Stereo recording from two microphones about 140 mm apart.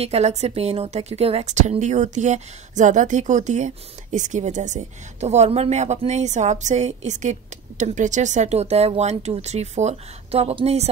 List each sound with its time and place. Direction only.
0.0 s a woman's voice: 50° right (ahead or behind)